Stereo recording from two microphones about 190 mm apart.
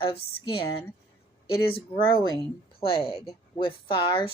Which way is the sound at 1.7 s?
25° left (ahead or behind).